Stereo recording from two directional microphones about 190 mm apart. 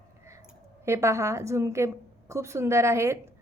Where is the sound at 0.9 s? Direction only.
15° right (ahead or behind).